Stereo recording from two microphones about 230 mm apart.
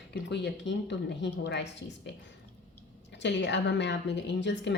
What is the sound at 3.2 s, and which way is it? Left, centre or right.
A woman's voice, left.